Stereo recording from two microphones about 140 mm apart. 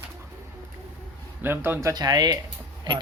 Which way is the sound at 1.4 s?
15° right (ahead or behind).